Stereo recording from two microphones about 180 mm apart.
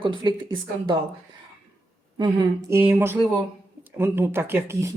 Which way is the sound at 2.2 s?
25° right (ahead or behind).